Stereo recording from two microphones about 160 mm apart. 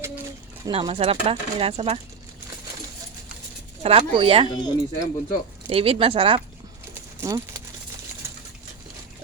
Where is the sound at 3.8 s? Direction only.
35° right (ahead or behind).